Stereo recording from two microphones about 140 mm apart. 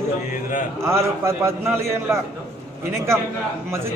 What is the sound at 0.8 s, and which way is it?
A man's voice, 20° right (ahead or behind).